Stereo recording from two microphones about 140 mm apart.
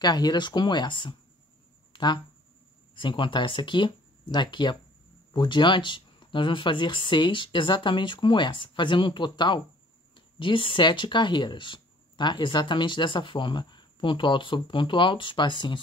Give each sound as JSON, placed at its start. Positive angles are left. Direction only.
{"t": 0.0, "sound": "speech", "side_deg": 30}
{"t": 1.9, "sound": "a sound", "side_deg": 30}
{"t": 2.9, "sound": "speech", "side_deg": 35}